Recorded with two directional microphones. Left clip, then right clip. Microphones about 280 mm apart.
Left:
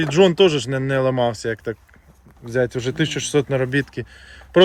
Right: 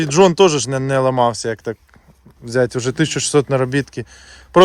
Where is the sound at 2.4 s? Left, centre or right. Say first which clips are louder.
Right 4 dB; right.